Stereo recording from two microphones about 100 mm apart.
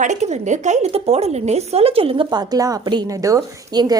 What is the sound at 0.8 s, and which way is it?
Speech, 80° right.